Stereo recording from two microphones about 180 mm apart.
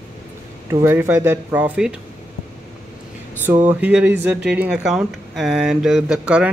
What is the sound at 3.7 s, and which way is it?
Speech, 5° right (ahead or behind).